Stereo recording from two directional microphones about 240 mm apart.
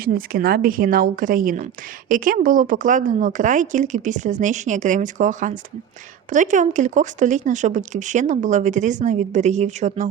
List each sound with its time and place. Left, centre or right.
0.0 s speech: right